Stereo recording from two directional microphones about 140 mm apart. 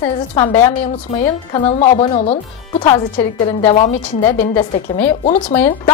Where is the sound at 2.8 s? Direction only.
35° left (ahead or behind).